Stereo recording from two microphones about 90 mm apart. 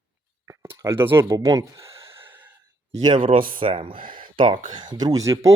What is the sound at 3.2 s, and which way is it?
Speech, 75° right (ahead or behind).